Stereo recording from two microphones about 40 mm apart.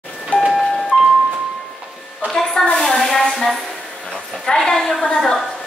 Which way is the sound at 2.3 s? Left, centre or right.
Centre.